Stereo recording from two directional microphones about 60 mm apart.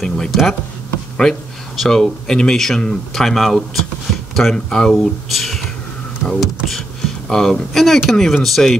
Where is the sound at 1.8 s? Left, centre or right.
Centre.